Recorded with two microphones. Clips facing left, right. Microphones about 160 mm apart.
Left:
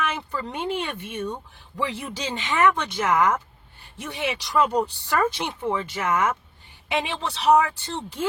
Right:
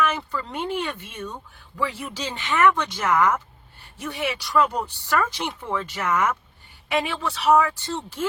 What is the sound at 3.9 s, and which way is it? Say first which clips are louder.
Speech: right 1 dB; 20° left (ahead or behind).